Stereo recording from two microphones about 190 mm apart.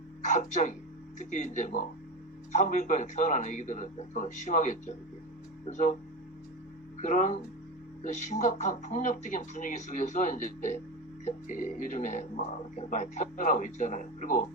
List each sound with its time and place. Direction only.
0.3 s speech: 40° left (ahead or behind)
7.0 s speech: 40° left (ahead or behind)